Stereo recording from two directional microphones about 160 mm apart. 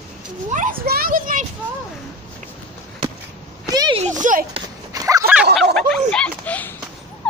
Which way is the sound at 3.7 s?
25° right (ahead or behind).